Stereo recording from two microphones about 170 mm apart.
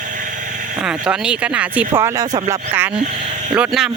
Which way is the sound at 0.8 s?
5° right (ahead or behind).